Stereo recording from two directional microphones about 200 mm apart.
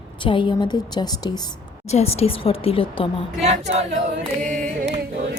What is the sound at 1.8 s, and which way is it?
A woman's voice, 30° left (ahead or behind).